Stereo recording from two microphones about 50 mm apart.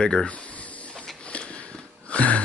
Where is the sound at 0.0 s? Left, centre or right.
Centre.